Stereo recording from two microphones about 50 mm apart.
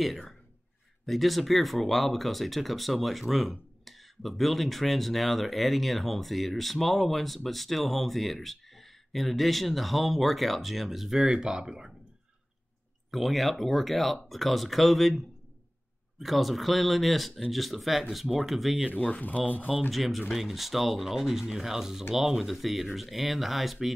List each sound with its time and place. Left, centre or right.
0.0 s speech: centre
13.1 s speech: centre
18.9 s speech: left
19.9 s speech: centre